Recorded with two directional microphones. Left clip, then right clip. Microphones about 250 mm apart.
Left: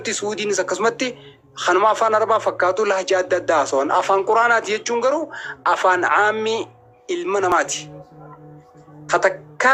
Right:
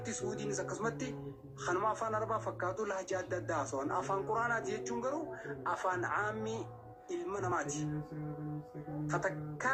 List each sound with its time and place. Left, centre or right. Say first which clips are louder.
0.0 s speech: left 16 dB; left
9.0 s a woman's voice: left 19 dB; left